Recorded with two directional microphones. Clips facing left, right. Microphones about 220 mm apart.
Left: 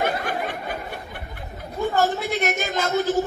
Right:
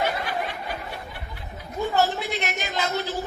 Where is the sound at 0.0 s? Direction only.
50° left (ahead or behind).